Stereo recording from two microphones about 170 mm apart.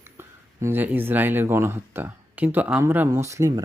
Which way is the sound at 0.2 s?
10° right (ahead or behind).